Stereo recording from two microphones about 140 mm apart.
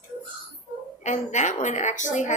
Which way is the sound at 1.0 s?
60° left (ahead or behind).